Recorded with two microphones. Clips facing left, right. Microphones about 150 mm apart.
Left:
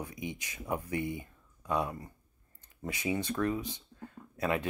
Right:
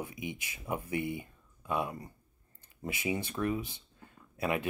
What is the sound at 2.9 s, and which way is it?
Speech, 25° right (ahead or behind).